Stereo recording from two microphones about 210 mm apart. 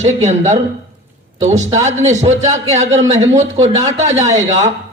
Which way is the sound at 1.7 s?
35° right (ahead or behind).